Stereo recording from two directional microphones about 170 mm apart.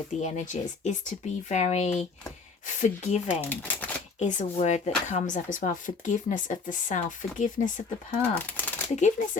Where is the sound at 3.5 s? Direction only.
10° left (ahead or behind).